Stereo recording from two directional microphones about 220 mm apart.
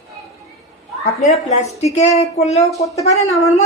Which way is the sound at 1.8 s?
30° left (ahead or behind).